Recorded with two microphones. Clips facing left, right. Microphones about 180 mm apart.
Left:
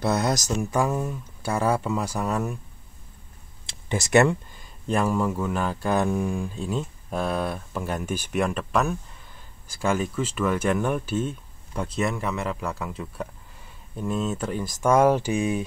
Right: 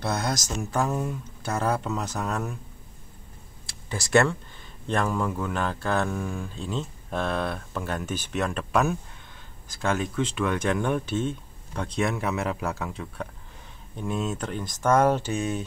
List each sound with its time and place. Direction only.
0.6 s speech: 10° left (ahead or behind)
3.6 s speech: 20° left (ahead or behind)